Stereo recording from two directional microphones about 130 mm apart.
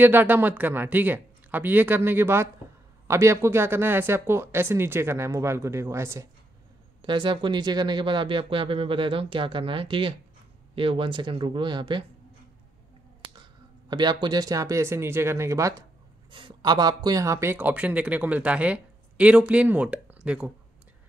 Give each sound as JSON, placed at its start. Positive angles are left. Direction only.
{"t": 0.0, "sound": "speech", "side_deg": -15}
{"t": 7.0, "sound": "speech", "side_deg": -40}
{"t": 13.8, "sound": "speech", "side_deg": -35}
{"t": 16.3, "sound": "speech", "side_deg": -40}